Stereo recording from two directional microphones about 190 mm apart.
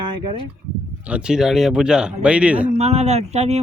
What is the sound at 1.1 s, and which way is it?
Speech, 5° right (ahead or behind).